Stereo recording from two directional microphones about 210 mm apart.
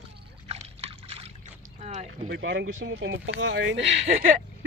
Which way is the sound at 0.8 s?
30° right (ahead or behind).